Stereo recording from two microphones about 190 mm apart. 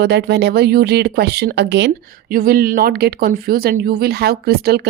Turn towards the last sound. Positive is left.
turn(degrees=-55)  # may be behind; listen again after turning